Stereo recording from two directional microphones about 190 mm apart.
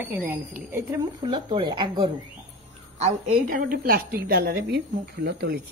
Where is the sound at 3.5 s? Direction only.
50° right (ahead or behind).